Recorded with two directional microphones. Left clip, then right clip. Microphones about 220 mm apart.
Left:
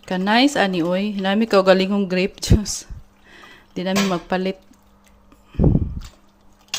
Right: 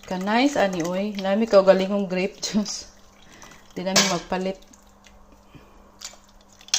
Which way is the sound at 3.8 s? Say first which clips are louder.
Even; 40° left (ahead or behind).